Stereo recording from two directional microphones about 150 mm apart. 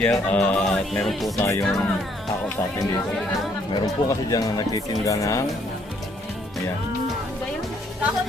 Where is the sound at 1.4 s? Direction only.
20° left (ahead or behind).